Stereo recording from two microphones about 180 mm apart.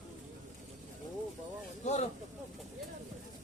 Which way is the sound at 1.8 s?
40° left (ahead or behind).